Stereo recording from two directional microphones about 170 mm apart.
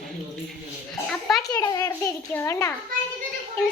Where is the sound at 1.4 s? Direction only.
25° left (ahead or behind).